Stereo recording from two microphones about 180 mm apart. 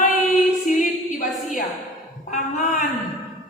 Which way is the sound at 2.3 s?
45° left (ahead or behind).